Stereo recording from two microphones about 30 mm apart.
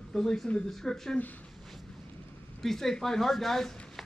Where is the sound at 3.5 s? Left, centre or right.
Centre.